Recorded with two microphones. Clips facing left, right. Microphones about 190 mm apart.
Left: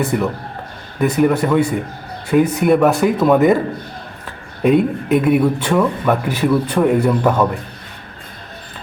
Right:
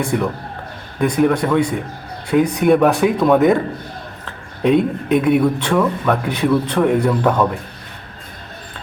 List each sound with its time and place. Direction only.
0.0 s a man's voice: 5° left (ahead or behind)